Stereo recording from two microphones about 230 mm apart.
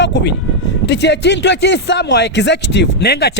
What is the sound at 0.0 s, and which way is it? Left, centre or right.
Speech, left.